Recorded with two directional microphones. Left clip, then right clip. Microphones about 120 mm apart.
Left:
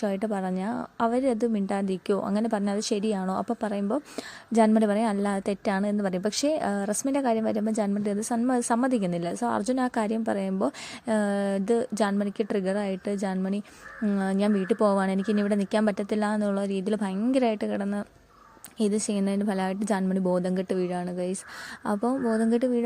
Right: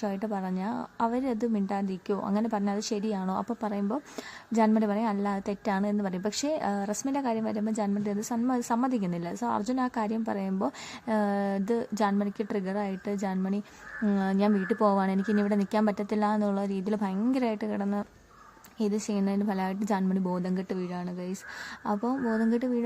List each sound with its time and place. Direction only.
0.0 s a woman's voice: 30° left (ahead or behind)